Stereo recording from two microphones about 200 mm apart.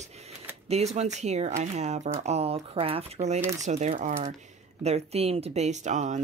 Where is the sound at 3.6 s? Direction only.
35° right (ahead or behind).